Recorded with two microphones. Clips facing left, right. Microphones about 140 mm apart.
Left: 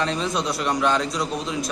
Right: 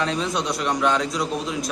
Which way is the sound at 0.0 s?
Centre (ahead or behind).